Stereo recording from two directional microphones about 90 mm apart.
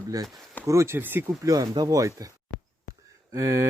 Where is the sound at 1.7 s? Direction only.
45° right (ahead or behind).